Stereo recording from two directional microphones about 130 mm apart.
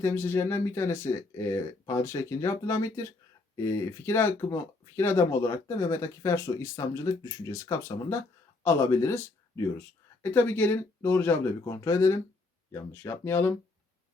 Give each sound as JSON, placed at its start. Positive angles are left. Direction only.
{"t": 0.0, "sound": "speech", "side_deg": 20}